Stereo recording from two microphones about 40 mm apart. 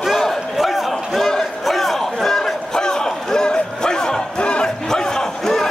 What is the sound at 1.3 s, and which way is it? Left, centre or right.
Chatter, centre.